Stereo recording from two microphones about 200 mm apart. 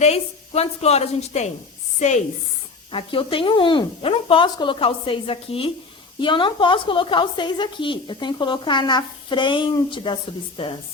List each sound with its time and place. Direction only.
0.0 s a woman's voice: 30° left (ahead or behind)